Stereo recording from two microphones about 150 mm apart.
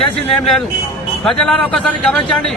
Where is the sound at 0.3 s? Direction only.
5° left (ahead or behind).